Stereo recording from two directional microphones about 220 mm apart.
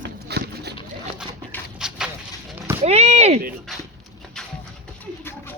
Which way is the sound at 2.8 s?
30° right (ahead or behind).